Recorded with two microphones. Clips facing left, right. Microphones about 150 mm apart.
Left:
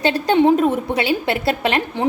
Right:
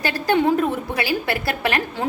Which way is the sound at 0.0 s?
25° left (ahead or behind).